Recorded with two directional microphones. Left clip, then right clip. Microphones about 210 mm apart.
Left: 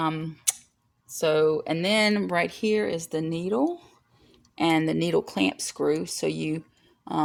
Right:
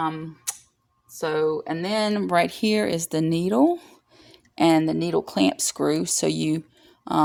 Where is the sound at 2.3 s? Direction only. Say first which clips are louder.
Right 3 dB; 20° right (ahead or behind).